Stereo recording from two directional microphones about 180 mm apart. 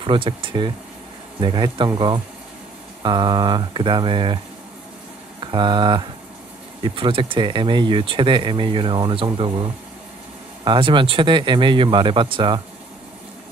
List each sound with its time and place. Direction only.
0.0 s speech: 30° right (ahead or behind)
5.4 s speech: 25° right (ahead or behind)